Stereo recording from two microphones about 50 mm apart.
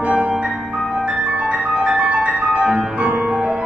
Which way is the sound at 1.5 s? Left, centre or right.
Right.